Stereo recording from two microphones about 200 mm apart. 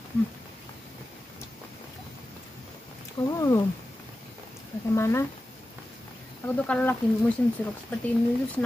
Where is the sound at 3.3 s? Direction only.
15° left (ahead or behind).